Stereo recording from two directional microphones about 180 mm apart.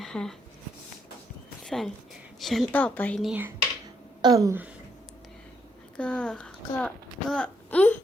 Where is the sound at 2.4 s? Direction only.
Centre (ahead or behind).